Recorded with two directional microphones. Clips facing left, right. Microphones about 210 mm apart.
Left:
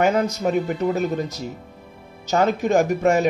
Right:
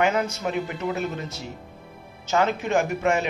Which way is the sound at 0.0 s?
35° left (ahead or behind).